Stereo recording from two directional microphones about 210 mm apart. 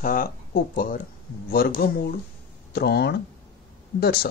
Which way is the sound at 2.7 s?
50° left (ahead or behind).